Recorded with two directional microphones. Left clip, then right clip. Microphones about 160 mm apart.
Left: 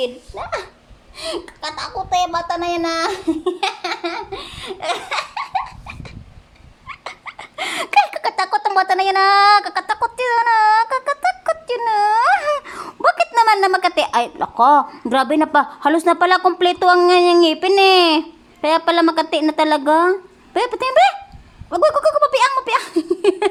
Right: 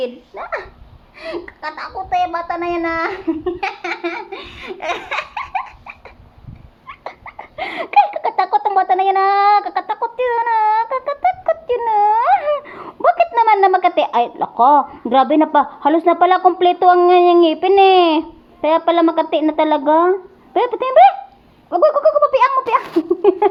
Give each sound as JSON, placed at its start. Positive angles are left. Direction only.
{"t": 0.0, "sound": "a child's voice", "side_deg": -10}
{"t": 6.8, "sound": "dog", "side_deg": -5}
{"t": 7.3, "sound": "a child's voice", "side_deg": 20}
{"t": 21.7, "sound": "a sound", "side_deg": 15}
{"t": 22.2, "sound": "a child's voice", "side_deg": 30}